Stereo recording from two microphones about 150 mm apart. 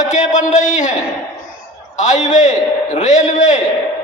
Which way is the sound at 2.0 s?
55° left (ahead or behind).